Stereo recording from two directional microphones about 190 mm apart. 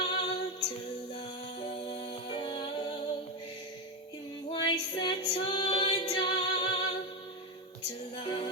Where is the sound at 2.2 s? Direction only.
25° left (ahead or behind).